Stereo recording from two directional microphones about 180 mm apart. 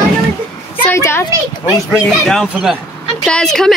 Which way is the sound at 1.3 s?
10° right (ahead or behind).